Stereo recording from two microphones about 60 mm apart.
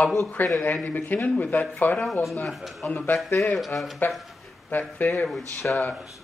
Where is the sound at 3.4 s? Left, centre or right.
Centre.